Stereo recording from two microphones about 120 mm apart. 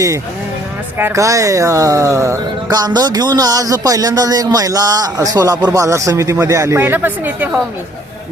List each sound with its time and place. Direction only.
0.9 s speech: 20° right (ahead or behind)